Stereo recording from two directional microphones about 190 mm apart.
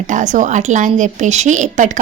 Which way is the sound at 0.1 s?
40° right (ahead or behind).